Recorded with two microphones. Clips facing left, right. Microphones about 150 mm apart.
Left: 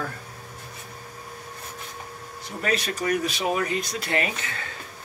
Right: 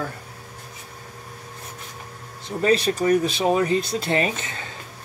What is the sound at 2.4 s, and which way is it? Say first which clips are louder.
Speech: right 7 dB; 30° right (ahead or behind).